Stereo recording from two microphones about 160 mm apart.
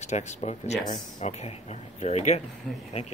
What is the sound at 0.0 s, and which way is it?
Speech, 45° left (ahead or behind).